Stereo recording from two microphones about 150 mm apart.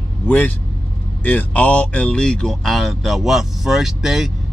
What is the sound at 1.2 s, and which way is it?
Speech, 10° left (ahead or behind).